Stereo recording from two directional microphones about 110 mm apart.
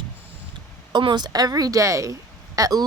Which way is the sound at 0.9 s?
45° right (ahead or behind).